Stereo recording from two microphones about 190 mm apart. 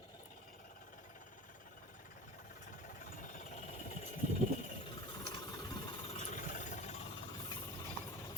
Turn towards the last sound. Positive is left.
turn(degrees=35)  # may be behind; listen again after turning